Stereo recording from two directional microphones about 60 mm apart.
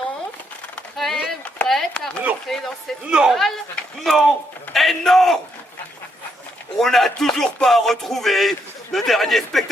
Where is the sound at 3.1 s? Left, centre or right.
Centre.